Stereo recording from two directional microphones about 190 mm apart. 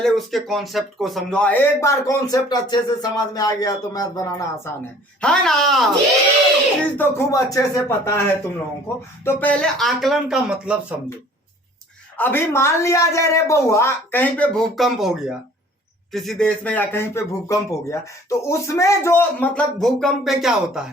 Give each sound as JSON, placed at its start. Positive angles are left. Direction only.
{"t": 0.0, "sound": "speech", "side_deg": 0}
{"t": 5.2, "sound": "speech", "side_deg": 5}
{"t": 6.9, "sound": "speech", "side_deg": 10}
{"t": 9.2, "sound": "speech", "side_deg": 10}
{"t": 12.1, "sound": "speech", "side_deg": 10}